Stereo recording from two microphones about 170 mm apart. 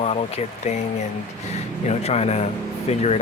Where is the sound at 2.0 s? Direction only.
40° left (ahead or behind).